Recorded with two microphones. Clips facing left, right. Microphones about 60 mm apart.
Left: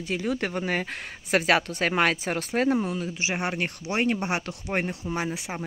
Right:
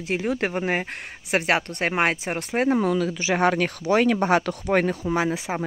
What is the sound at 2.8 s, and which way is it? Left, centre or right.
Speech, right.